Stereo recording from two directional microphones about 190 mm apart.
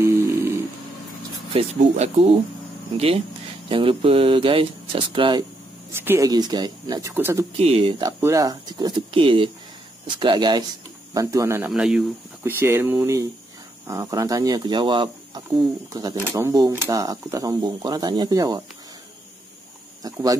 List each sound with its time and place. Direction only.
0.0 s snoring: 15° right (ahead or behind)
1.5 s speech: 35° right (ahead or behind)
3.6 s speech: 30° right (ahead or behind)
5.9 s speech: 15° right (ahead or behind)
7.5 s speech: 30° right (ahead or behind)
8.0 s speech: 15° right (ahead or behind)
20.0 s speech: 20° right (ahead or behind)